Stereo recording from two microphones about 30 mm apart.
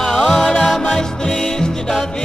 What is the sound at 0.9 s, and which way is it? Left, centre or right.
Music, left.